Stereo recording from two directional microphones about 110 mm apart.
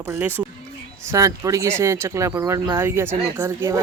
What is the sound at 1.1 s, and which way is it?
Speech, 30° right (ahead or behind).